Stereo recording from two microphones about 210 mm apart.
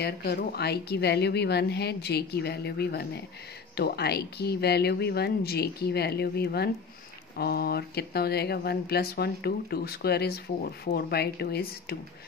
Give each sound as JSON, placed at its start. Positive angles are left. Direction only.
{"t": 0.0, "sound": "speech", "side_deg": 50}